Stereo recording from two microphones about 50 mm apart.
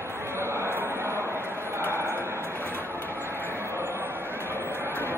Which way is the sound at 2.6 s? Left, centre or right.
Left.